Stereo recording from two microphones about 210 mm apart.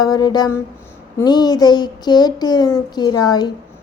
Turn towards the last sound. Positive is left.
turn(degrees=20)  # may be behind; listen again after turning